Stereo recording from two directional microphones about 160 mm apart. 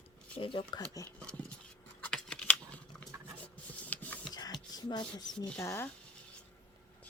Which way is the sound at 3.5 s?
10° left (ahead or behind).